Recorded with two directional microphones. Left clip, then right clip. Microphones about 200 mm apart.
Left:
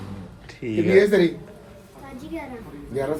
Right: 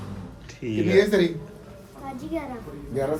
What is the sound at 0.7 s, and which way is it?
Speech, 25° left (ahead or behind).